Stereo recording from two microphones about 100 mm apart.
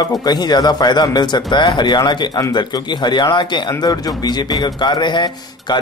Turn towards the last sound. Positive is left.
turn(degrees=50)  # may be behind; listen again after turning